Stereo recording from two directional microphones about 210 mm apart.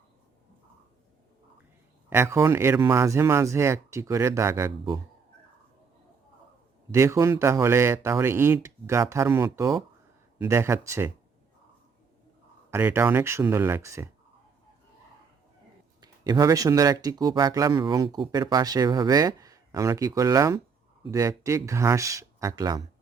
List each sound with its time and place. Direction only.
2.0 s speech: 10° right (ahead or behind)
6.9 s speech: 15° right (ahead or behind)
12.7 s speech: 10° right (ahead or behind)
16.0 s speech: 20° right (ahead or behind)